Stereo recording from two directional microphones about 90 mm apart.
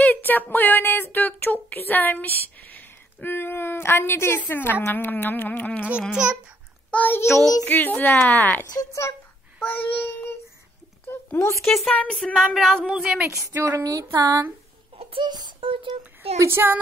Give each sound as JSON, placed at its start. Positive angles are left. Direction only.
{"t": 0.0, "sound": "speech", "side_deg": 20}
{"t": 5.9, "sound": "speech", "side_deg": -10}
{"t": 6.9, "sound": "a child's voice", "side_deg": 20}
{"t": 8.7, "sound": "speech", "side_deg": 35}
{"t": 9.6, "sound": "speech", "side_deg": 20}
{"t": 11.3, "sound": "speech", "side_deg": 35}
{"t": 11.6, "sound": "speech", "side_deg": 0}
{"t": 11.9, "sound": "a sound", "side_deg": 10}
{"t": 12.5, "sound": "speech", "side_deg": 0}
{"t": 12.8, "sound": "speech", "side_deg": -10}
{"t": 13.5, "sound": "speech", "side_deg": -30}
{"t": 15.2, "sound": "a sound", "side_deg": -50}
{"t": 16.3, "sound": "a woman's voice", "side_deg": -25}